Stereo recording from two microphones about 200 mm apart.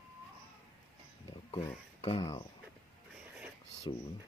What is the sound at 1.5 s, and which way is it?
Speech, 25° left (ahead or behind).